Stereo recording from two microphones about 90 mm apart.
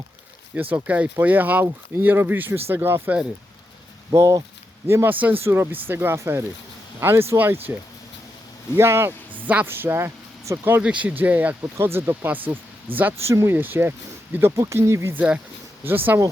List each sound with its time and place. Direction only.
0.5 s speech: 15° right (ahead or behind)
4.1 s speech: 35° right (ahead or behind)
10.8 s speech: 15° right (ahead or behind); by 15.1 s 30° right (ahead or behind)
15.1 s speech: 15° right (ahead or behind)